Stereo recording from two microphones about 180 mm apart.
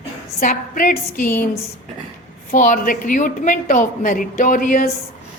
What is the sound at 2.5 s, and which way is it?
A woman's voice, 45° left (ahead or behind).